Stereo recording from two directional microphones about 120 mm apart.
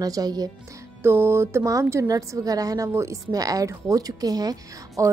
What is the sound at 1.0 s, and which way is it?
A woman's voice, 20° right (ahead or behind).